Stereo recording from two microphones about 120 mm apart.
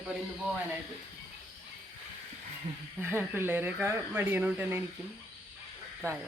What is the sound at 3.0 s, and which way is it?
Speech, 15° right (ahead or behind).